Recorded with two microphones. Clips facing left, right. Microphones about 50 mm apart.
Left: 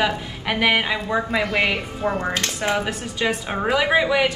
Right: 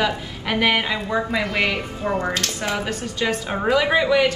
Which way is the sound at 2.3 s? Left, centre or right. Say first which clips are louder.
Left 2 dB; left.